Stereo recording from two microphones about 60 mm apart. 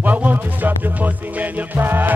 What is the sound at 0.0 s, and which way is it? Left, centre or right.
Music, right.